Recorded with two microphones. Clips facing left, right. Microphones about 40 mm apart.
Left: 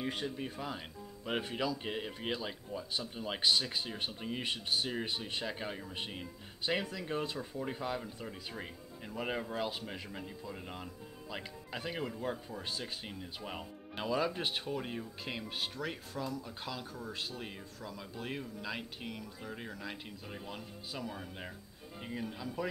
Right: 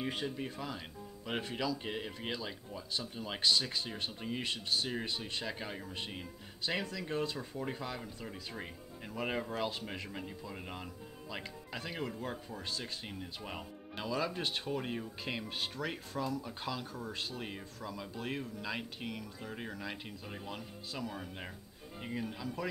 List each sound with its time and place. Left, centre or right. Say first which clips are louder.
0.0 s speech: even; centre
4.4 s speech: left 1 dB; centre
7.3 s speech: left 1 dB; centre
10.1 s speech: even; centre
11.2 s speech: even; centre
14.6 s speech: right 1 dB; centre